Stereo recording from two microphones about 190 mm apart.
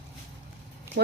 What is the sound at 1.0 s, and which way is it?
Speech, 60° right (ahead or behind).